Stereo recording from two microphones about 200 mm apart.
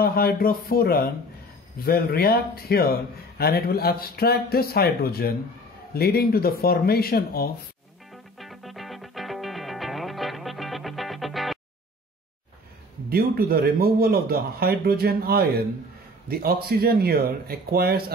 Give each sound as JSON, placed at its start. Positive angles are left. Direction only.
{"t": 0.0, "sound": "a man's voice", "side_deg": 50}
{"t": 8.1, "sound": "music", "side_deg": 0}
{"t": 13.1, "sound": "speech", "side_deg": -50}
{"t": 16.6, "sound": "speech", "side_deg": -50}